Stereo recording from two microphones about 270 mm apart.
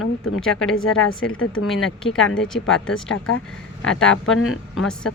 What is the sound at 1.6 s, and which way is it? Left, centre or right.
A woman's voice, centre.